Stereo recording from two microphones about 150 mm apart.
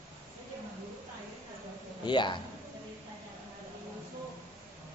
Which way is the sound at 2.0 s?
30° left (ahead or behind).